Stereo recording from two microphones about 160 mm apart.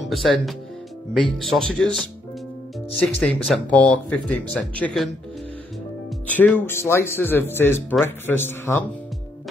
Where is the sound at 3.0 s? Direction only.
5° left (ahead or behind).